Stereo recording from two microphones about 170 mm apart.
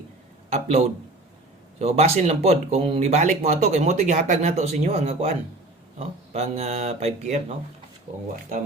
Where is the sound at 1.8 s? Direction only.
35° right (ahead or behind).